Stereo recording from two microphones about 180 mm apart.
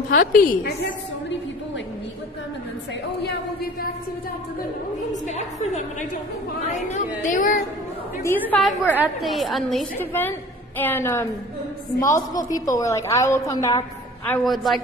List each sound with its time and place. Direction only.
0.1 s a woman's voice: 50° left (ahead or behind)
5.1 s a sound: 40° left (ahead or behind)
6.6 s a woman's voice: 40° left (ahead or behind)
8.2 s a woman's voice: 10° left (ahead or behind)
8.5 s a woman's voice: centre (ahead or behind)
9.9 s a woman's voice: 10° left (ahead or behind)
12.4 s a woman's voice: 20° left (ahead or behind)
14.4 s a woman's voice: centre (ahead or behind)